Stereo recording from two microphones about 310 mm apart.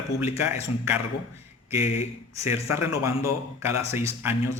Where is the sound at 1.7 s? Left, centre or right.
Centre.